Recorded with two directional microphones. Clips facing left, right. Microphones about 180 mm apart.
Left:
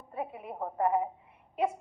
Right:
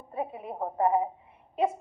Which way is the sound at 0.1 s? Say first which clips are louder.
Right 3 dB; 25° right (ahead or behind).